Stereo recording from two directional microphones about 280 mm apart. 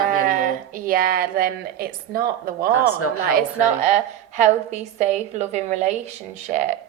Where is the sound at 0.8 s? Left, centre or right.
Right.